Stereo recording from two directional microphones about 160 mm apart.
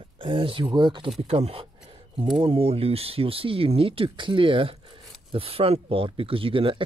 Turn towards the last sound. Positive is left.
turn(degrees=-35)  # may be behind; listen again after turning